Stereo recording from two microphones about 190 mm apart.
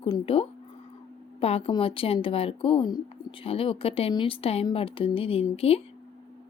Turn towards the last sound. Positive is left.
turn(degrees=30)  # may be behind; listen again after turning